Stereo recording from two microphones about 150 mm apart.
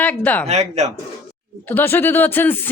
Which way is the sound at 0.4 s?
45° right (ahead or behind).